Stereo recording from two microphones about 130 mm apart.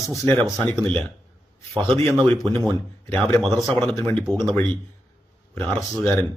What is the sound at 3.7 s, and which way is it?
Speech, 5° left (ahead or behind).